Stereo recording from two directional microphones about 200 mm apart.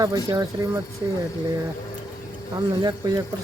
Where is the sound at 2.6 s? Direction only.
20° right (ahead or behind).